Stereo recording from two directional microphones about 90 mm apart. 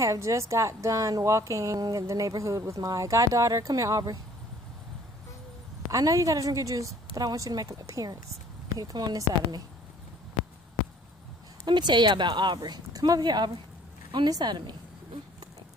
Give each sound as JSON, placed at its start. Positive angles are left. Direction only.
{"t": 0.0, "sound": "a woman's voice", "side_deg": -35}
{"t": 5.9, "sound": "a woman's voice", "side_deg": -40}
{"t": 11.6, "sound": "a woman's voice", "side_deg": -55}